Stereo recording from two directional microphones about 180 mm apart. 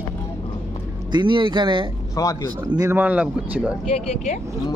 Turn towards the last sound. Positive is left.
turn(degrees=-10)  # may be behind; listen again after turning